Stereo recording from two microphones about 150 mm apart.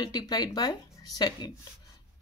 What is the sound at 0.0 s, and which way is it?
A woman's voice, 25° left (ahead or behind).